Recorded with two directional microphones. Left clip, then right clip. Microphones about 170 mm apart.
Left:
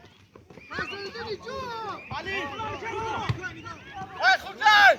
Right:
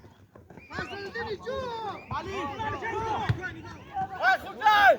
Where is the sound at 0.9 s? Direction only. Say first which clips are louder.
Even; 45° right (ahead or behind).